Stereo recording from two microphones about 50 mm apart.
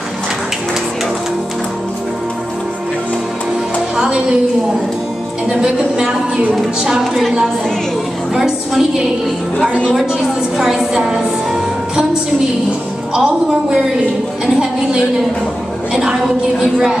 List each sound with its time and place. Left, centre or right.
3.9 s music: centre
5.5 s a woman's voice: centre
8.4 s a woman's voice: centre
10.6 s a woman's voice: centre
11.9 s music: centre
13.2 s a woman's voice: centre